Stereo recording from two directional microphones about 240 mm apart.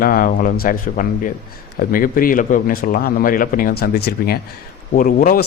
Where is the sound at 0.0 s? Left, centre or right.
Left.